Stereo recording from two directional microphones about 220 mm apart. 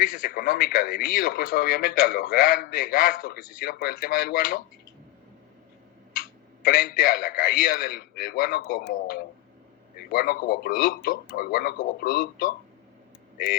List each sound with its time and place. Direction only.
0.0 s speech: 40° left (ahead or behind)
6.1 s speech: 40° left (ahead or behind)